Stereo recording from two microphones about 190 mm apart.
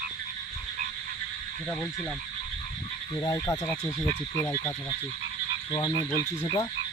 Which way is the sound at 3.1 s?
20° left (ahead or behind).